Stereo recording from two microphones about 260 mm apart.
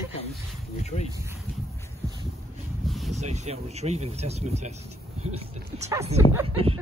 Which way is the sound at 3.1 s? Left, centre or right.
Right.